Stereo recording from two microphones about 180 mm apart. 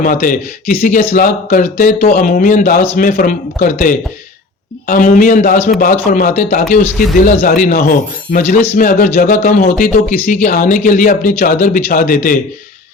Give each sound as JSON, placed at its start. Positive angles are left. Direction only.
{"t": 0.0, "sound": "speech", "side_deg": 50}